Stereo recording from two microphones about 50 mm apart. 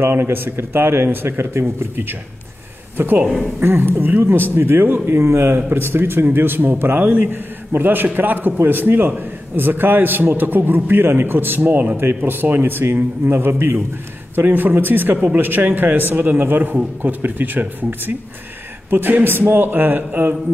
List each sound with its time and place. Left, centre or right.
0.0 s a man's voice: right
3.0 s a man's voice: right
12.0 s a man's voice: right
15.1 s speech: right
15.4 s a man's voice: right